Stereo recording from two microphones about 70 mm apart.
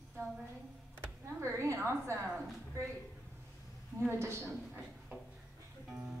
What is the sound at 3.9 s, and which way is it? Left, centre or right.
Speech, right.